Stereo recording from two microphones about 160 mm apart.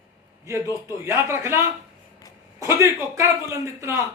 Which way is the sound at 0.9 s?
15° right (ahead or behind).